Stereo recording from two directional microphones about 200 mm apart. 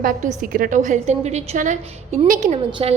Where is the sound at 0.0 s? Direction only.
45° right (ahead or behind).